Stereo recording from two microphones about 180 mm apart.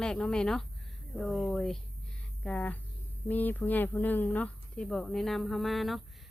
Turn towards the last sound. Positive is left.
turn(degrees=0)  # may be behind; listen again after turning